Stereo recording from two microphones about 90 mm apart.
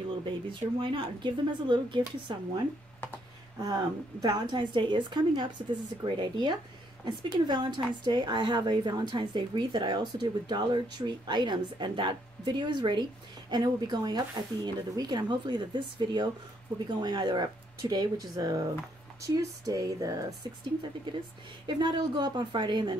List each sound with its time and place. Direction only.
0.2 s a woman's voice: 65° right (ahead or behind)
3.5 s a woman's voice: 45° right (ahead or behind); by 13.0 s 60° right (ahead or behind)
13.5 s speech: 50° right (ahead or behind)
21.1 s a woman's voice: 55° right (ahead or behind)